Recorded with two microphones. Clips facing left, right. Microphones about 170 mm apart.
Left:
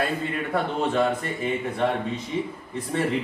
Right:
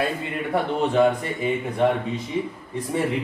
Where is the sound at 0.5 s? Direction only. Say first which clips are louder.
Right 3 dB; 15° right (ahead or behind).